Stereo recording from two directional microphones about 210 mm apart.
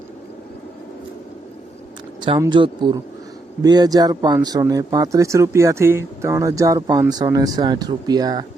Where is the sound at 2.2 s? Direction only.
20° right (ahead or behind).